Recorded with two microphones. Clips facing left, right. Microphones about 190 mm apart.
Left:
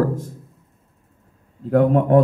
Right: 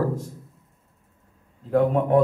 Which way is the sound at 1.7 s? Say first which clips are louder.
Left 4 dB; 55° left (ahead or behind).